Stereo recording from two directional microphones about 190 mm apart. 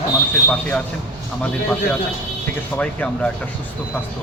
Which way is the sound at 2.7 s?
5° left (ahead or behind).